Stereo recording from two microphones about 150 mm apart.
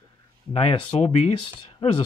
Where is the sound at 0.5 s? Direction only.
40° left (ahead or behind).